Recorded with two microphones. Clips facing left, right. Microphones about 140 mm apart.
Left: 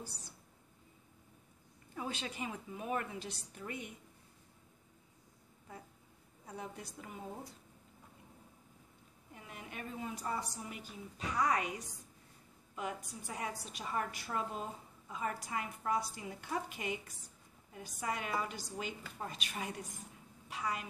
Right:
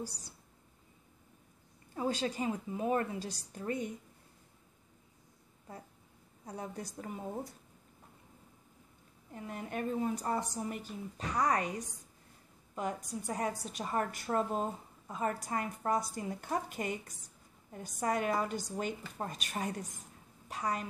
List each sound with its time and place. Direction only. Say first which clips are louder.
2.0 s a woman's voice: right 7 dB; 35° right (ahead or behind)
6.4 s a woman's voice: right 4 dB; 40° right (ahead or behind)
9.3 s a woman's voice: right 9 dB; 45° right (ahead or behind)